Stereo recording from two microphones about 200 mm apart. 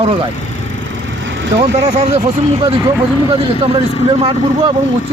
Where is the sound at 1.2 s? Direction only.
65° right (ahead or behind).